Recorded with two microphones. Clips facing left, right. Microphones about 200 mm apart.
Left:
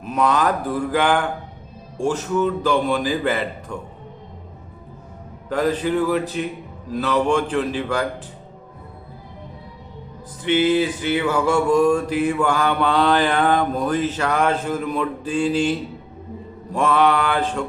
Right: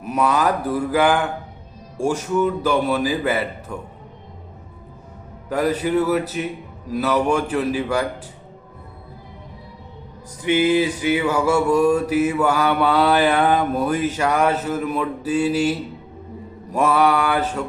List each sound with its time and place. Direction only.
0.0 s mantra: 10° right (ahead or behind)
5.5 s mantra: 10° right (ahead or behind)
10.4 s mantra: 10° right (ahead or behind)